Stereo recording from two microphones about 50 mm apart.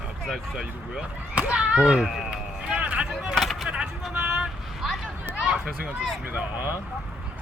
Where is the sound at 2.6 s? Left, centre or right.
Right.